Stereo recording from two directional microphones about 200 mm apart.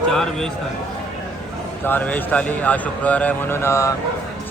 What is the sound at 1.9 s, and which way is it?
A man's voice, 10° left (ahead or behind).